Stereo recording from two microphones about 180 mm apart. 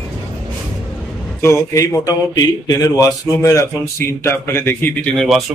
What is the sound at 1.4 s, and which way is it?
A man's voice, 15° left (ahead or behind).